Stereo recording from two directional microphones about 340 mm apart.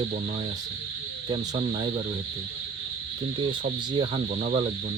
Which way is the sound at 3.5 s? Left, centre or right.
Centre.